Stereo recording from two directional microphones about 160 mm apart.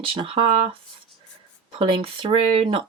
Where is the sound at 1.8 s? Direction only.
35° right (ahead or behind).